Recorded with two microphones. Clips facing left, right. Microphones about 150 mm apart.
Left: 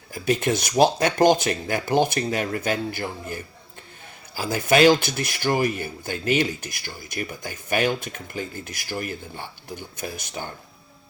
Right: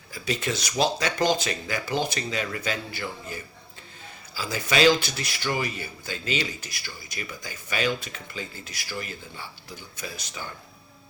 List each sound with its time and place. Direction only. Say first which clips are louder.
0.1 s speech: left 7 dB; 55° left (ahead or behind)